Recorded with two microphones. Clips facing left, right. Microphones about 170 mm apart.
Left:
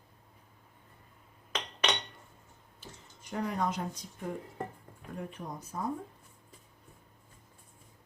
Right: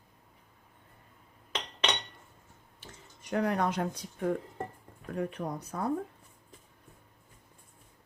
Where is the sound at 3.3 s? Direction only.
65° right (ahead or behind).